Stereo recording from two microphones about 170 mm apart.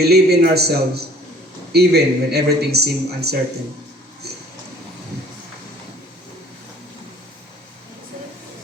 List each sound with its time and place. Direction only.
0.0 s speech: 70° right (ahead or behind)